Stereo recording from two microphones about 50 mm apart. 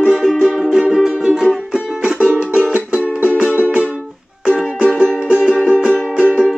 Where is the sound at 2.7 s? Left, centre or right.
Right.